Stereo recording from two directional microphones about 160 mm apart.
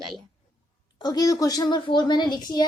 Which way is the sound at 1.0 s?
25° left (ahead or behind).